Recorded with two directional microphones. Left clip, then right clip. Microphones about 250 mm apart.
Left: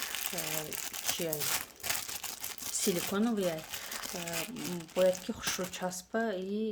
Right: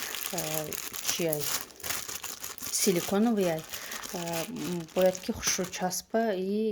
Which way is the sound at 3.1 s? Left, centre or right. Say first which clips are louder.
Right 5 dB; right.